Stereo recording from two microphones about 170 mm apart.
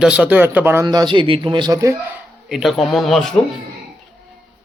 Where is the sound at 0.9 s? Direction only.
25° right (ahead or behind).